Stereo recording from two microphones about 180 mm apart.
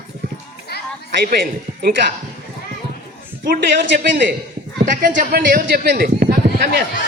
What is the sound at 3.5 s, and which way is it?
A man's voice, 50° right (ahead or behind).